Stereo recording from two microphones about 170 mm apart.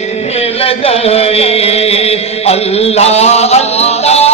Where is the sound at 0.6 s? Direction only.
35° left (ahead or behind).